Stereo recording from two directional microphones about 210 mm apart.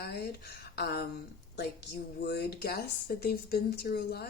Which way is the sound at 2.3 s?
50° left (ahead or behind).